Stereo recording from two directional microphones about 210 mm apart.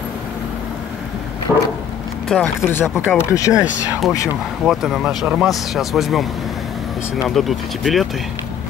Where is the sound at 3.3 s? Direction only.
15° left (ahead or behind).